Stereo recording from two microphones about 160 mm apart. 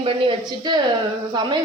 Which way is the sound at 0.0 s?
30° right (ahead or behind).